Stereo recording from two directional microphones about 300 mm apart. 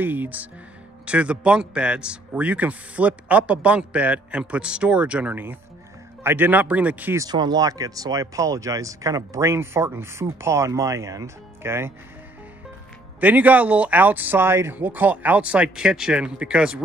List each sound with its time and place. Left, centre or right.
0.0 s a man's voice: centre
13.2 s a man's voice: centre